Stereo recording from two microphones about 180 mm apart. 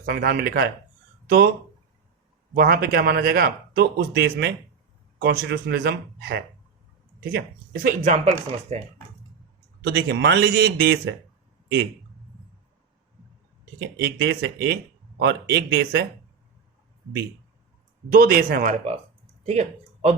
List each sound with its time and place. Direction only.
0.0 s a man's voice: 55° right (ahead or behind)
2.6 s a man's voice: 55° right (ahead or behind)
8.0 s speech: 40° right (ahead or behind)
9.8 s a man's voice: 65° right (ahead or behind)
13.7 s a man's voice: 65° right (ahead or behind)
18.1 s speech: 55° right (ahead or behind); by 20.1 s 35° right (ahead or behind)